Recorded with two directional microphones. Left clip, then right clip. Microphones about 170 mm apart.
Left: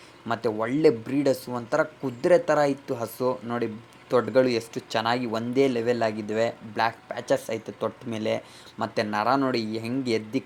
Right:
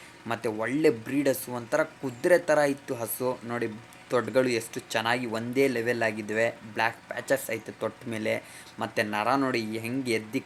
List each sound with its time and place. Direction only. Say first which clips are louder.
0.3 s speech: left 3 dB; 15° left (ahead or behind)